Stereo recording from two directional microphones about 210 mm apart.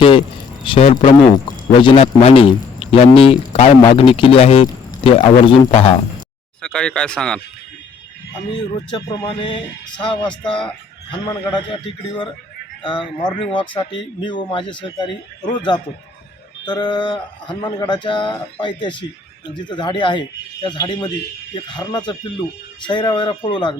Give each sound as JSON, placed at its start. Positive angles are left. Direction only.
{"t": 0.6, "sound": "speech", "side_deg": 25}
{"t": 1.5, "sound": "a sound", "side_deg": 20}
{"t": 1.8, "sound": "speech", "side_deg": 25}
{"t": 6.6, "sound": "speech", "side_deg": 5}
{"t": 8.5, "sound": "speech", "side_deg": 20}
{"t": 12.8, "sound": "speech", "side_deg": 25}